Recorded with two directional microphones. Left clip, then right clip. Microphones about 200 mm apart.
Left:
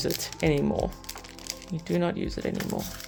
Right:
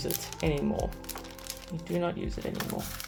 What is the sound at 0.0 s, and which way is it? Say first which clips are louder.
Speech: left 5 dB; 45° left (ahead or behind).